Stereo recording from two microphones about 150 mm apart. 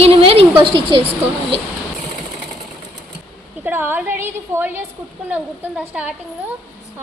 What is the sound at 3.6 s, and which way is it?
A woman's voice, 15° right (ahead or behind).